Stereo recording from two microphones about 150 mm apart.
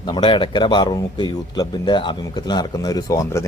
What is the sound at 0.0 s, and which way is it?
A man's voice, 30° left (ahead or behind).